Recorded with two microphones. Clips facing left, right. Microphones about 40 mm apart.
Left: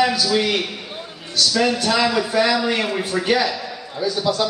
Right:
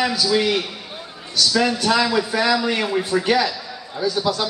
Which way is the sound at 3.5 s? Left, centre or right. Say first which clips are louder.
Left 4 dB; left.